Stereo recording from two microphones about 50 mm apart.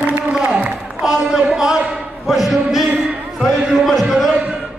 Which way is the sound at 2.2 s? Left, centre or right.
Centre.